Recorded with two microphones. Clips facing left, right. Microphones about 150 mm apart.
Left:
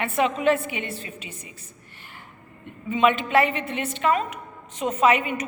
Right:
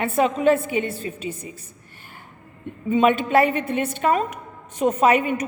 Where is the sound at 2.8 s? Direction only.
45° right (ahead or behind).